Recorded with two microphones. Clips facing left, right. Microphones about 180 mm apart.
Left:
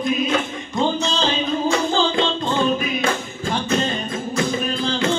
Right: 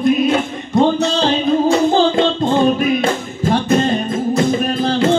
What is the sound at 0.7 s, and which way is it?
Music, 60° right (ahead or behind).